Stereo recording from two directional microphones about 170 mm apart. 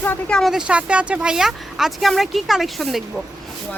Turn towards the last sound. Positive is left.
turn(degrees=0)  # may be behind; listen again after turning